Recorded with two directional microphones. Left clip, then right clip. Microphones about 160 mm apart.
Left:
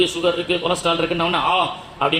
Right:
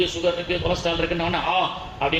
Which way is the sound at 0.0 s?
35° left (ahead or behind).